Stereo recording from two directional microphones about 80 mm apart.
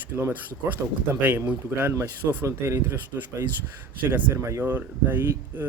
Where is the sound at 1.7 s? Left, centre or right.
Right.